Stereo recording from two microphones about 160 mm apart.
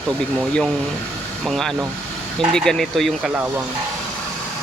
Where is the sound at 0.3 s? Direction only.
Centre (ahead or behind).